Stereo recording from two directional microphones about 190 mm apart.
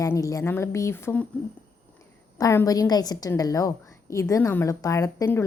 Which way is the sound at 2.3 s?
15° left (ahead or behind).